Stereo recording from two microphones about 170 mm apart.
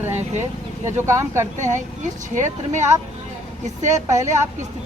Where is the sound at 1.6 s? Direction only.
45° right (ahead or behind).